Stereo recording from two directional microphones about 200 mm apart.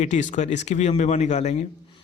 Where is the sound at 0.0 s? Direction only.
35° left (ahead or behind).